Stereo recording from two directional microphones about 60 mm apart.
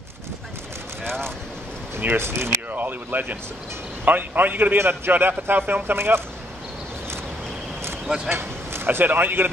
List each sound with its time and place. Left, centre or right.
2.0 s a man's voice: right
8.3 s speech: right